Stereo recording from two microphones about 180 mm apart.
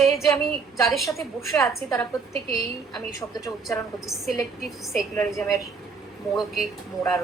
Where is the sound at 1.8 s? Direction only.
35° right (ahead or behind).